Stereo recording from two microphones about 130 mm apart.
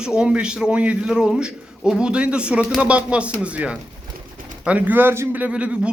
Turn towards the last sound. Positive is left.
turn(degrees=-10)  # may be behind; listen again after turning